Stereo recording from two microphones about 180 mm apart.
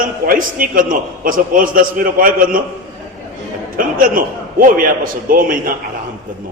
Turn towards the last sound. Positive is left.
turn(degrees=-50)  # may be behind; listen again after turning